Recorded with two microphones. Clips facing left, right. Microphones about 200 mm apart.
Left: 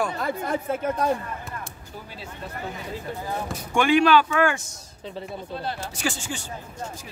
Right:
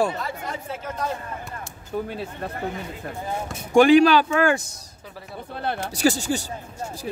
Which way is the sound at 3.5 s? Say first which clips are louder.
Right 7 dB; 35° right (ahead or behind).